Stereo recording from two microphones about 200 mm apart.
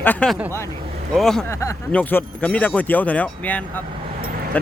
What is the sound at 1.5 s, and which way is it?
Speech, 15° left (ahead or behind).